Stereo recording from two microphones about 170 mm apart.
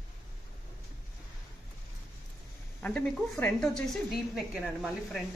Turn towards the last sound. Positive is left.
turn(degrees=0)  # may be behind; listen again after turning